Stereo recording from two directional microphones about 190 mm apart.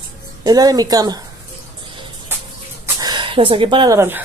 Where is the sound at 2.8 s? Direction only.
20° right (ahead or behind).